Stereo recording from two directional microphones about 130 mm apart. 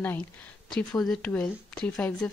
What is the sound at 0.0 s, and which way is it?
Speech, 15° left (ahead or behind).